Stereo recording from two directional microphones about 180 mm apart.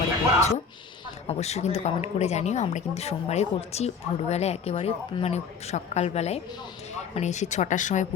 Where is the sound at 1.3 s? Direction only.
35° left (ahead or behind).